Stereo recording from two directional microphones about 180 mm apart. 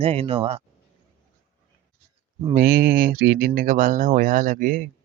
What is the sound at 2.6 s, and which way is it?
Speech, 55° right (ahead or behind).